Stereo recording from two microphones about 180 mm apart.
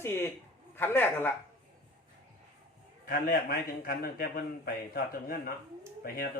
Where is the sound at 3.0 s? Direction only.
50° left (ahead or behind).